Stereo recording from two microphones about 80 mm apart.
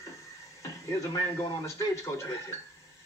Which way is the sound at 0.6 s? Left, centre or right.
Left.